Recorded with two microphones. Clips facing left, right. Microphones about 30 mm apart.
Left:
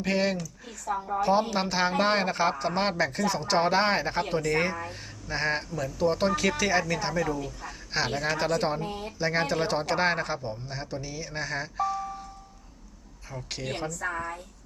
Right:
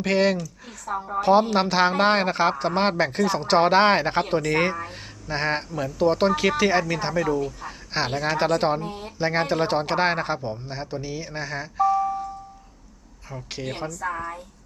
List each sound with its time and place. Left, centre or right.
0.0 s speech: right
0.9 s speech: right
4.7 s speech: right; by 12.0 s centre
13.3 s speech: centre